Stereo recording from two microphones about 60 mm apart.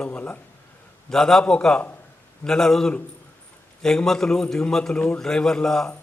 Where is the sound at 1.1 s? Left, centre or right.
Centre.